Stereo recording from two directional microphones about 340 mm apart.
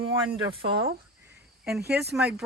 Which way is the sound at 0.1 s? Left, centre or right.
Centre.